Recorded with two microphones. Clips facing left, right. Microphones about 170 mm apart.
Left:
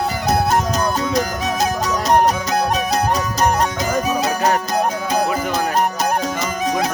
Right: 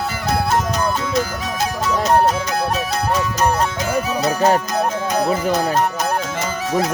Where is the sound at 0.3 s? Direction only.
20° left (ahead or behind).